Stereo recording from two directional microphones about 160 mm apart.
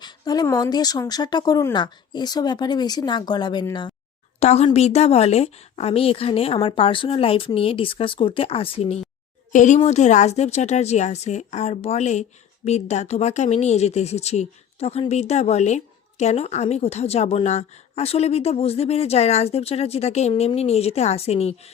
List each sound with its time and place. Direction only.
0.0 s speech: 25° left (ahead or behind)
4.4 s speech: 40° left (ahead or behind)
9.5 s a woman's voice: 50° left (ahead or behind)